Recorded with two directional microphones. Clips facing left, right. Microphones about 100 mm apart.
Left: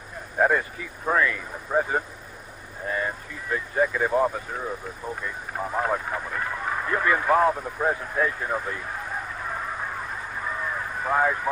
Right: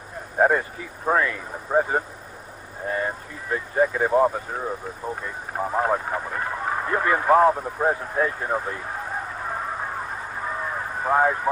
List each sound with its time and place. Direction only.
0.3 s speech: 35° right (ahead or behind)
10.6 s vehicle: 35° right (ahead or behind)